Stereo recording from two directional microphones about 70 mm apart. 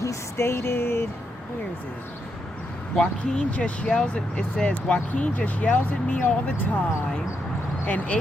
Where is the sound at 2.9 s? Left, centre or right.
Centre.